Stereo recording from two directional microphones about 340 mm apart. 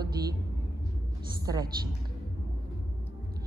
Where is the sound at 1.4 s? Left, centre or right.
Centre.